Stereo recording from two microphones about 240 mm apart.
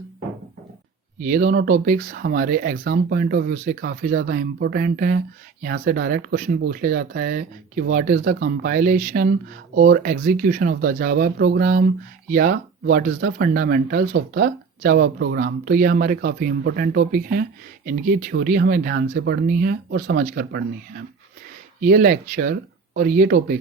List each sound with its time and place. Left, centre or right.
1.2 s speech: right
21.8 s speech: right